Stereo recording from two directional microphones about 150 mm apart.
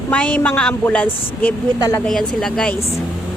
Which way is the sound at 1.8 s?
25° left (ahead or behind).